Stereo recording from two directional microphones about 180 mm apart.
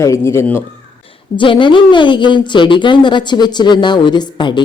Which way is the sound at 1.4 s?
25° left (ahead or behind).